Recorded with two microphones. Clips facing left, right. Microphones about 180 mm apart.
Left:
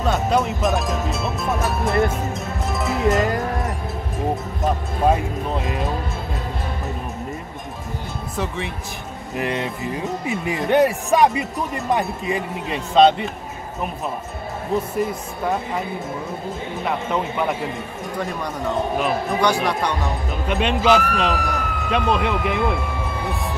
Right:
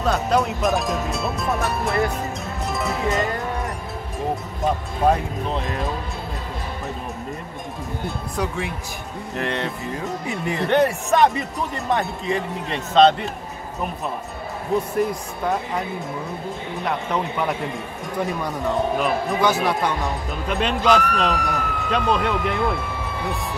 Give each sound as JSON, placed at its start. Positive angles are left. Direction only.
{"t": 0.0, "sound": "speech", "side_deg": 0}
{"t": 5.1, "sound": "speech", "side_deg": 0}
{"t": 8.4, "sound": "speech", "side_deg": 0}
{"t": 9.4, "sound": "speech", "side_deg": 15}
{"t": 11.2, "sound": "speech", "side_deg": 0}
{"t": 15.0, "sound": "speech", "side_deg": 0}
{"t": 16.8, "sound": "speech", "side_deg": 5}
{"t": 18.9, "sound": "speech", "side_deg": 0}